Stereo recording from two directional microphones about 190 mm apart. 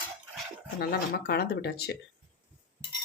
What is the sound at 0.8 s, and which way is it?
Speech, 55° left (ahead or behind).